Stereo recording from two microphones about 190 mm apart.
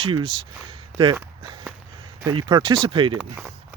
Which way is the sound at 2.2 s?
25° right (ahead or behind).